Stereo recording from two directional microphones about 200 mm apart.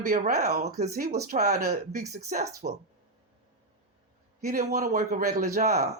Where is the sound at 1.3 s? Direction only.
50° right (ahead or behind).